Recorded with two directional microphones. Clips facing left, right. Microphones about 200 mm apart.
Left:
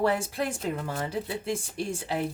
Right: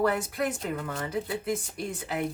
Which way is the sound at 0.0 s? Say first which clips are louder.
Even; 30° left (ahead or behind).